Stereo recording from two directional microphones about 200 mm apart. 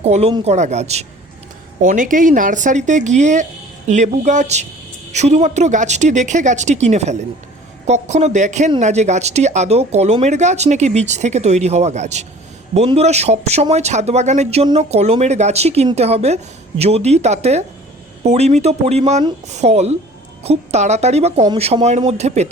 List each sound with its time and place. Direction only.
0.0 s speech: 30° right (ahead or behind)